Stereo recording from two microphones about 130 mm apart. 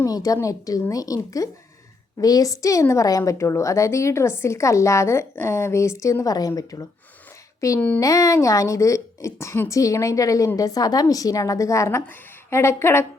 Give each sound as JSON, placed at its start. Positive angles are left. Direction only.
{"t": 0.0, "sound": "a woman's voice", "side_deg": 25}
{"t": 7.8, "sound": "speech", "side_deg": 10}
{"t": 8.0, "sound": "a woman's voice", "side_deg": 25}